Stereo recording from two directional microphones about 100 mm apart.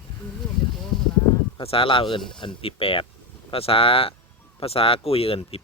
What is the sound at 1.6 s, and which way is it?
Speech, 65° left (ahead or behind).